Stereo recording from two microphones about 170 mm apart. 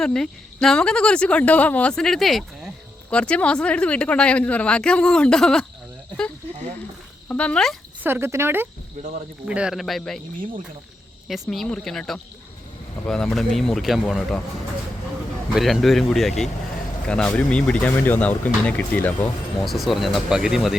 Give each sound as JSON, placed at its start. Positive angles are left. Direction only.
{"t": 0.0, "sound": "speech", "side_deg": 5}
{"t": 7.3, "sound": "speech", "side_deg": 5}
{"t": 8.0, "sound": "speech", "side_deg": -15}
{"t": 9.0, "sound": "speech", "side_deg": -40}
{"t": 9.5, "sound": "speech", "side_deg": -5}
{"t": 11.3, "sound": "speech", "side_deg": 0}
{"t": 15.5, "sound": "speech", "side_deg": 0}